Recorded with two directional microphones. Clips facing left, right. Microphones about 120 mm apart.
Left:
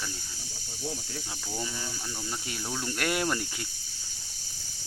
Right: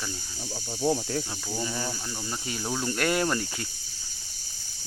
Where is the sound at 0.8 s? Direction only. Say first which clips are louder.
Right 11 dB; 70° right (ahead or behind).